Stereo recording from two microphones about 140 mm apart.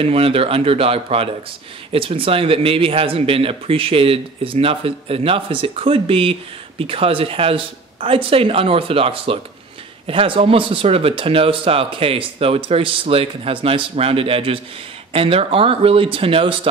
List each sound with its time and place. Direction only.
0.0 s speech: 45° right (ahead or behind)